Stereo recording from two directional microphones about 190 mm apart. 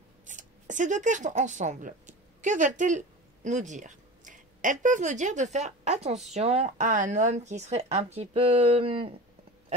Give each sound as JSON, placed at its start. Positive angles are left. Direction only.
{"t": 0.3, "sound": "speech", "side_deg": -40}